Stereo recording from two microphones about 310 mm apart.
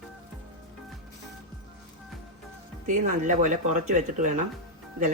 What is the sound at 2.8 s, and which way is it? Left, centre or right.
Speech, right.